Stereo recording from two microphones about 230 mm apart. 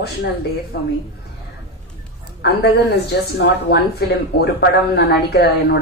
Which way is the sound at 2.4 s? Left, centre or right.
Left.